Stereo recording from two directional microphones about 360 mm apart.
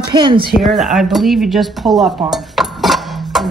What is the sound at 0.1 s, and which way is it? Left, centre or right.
Speech, centre.